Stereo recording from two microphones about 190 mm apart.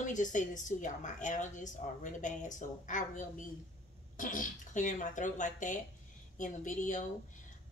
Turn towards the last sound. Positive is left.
turn(degrees=40)  # may be behind; listen again after turning